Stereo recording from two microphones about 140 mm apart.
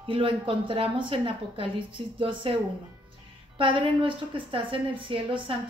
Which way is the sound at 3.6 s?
40° right (ahead or behind).